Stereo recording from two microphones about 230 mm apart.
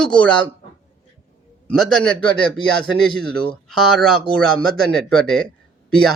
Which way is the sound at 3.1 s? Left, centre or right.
Right.